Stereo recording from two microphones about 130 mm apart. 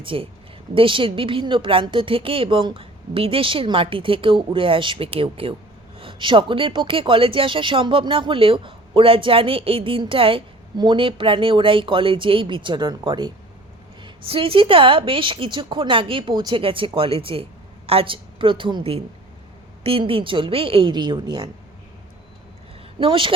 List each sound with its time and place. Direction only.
0.0 s a woman's voice: 40° right (ahead or behind)
23.0 s speech: 40° right (ahead or behind)